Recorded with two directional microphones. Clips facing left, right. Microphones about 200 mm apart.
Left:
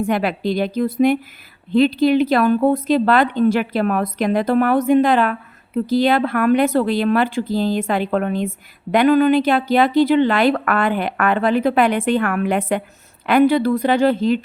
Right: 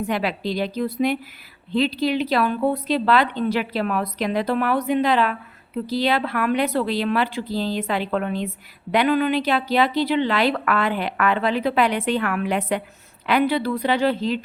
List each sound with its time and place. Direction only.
0.0 s speech: 50° left (ahead or behind)